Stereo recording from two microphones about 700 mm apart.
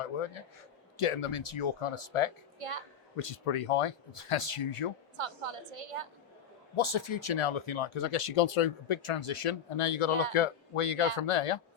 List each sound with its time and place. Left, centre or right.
0.0 s speech: left
2.6 s a woman's voice: right
3.2 s speech: left
5.1 s a woman's voice: right
6.7 s speech: left